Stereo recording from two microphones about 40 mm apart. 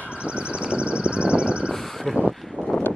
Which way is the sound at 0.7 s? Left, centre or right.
Right.